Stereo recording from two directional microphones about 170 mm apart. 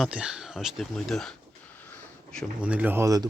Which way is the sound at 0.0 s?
5° right (ahead or behind).